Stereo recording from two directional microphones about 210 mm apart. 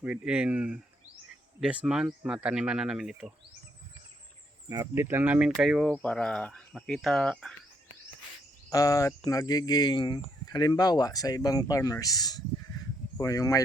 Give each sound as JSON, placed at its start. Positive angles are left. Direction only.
{"t": 0.0, "sound": "speech", "side_deg": -5}
{"t": 4.7, "sound": "speech", "side_deg": -15}
{"t": 8.7, "sound": "speech", "side_deg": 15}